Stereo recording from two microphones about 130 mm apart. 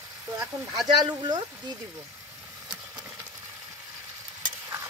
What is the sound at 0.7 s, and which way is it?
Speech, 30° right (ahead or behind).